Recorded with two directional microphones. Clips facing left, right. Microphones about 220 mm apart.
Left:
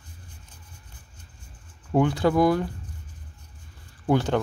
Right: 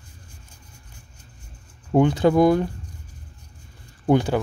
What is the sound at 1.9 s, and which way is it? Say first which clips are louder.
Speech: right 4 dB; 20° right (ahead or behind).